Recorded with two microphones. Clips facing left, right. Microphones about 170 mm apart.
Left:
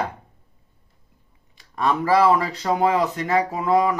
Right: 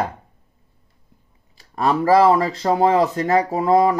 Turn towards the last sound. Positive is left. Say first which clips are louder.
# right 4 dB
turn(degrees=-35)  # may be behind; listen again after turning